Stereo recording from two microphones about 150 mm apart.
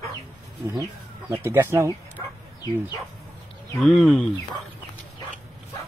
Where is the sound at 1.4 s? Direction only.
15° right (ahead or behind).